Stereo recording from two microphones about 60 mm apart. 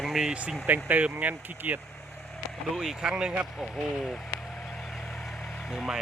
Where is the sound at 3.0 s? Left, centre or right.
Centre.